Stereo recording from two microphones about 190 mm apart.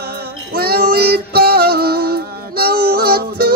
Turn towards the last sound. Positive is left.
turn(degrees=-55)  # may be behind; listen again after turning